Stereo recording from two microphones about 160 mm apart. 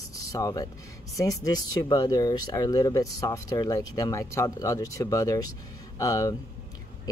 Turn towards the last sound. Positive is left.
turn(degrees=20)  # may be behind; listen again after turning